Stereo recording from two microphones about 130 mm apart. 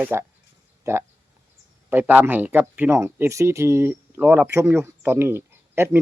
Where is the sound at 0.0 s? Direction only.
20° right (ahead or behind).